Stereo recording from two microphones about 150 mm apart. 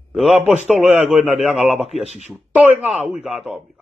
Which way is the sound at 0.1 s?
Centre (ahead or behind).